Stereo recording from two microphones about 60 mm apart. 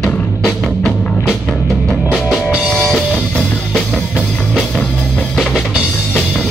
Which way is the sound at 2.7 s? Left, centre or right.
Centre.